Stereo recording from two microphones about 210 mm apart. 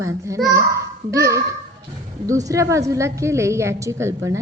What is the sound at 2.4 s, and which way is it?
A woman's voice, 15° right (ahead or behind).